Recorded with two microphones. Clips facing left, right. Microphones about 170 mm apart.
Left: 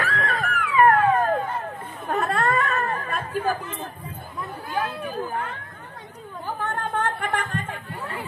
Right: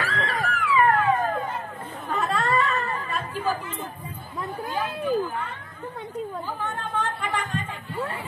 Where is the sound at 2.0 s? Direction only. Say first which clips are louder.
Left 2 dB; 60° left (ahead or behind).